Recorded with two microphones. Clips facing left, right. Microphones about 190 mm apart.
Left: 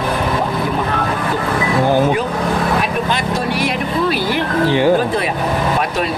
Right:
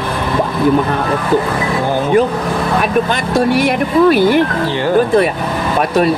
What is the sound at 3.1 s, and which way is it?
Speech, 55° right (ahead or behind).